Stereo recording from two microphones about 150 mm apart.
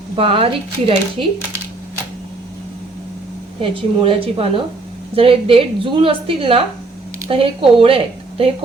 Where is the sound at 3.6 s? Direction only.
40° right (ahead or behind).